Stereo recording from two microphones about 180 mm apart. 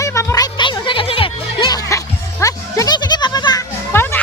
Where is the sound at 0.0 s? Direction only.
15° left (ahead or behind).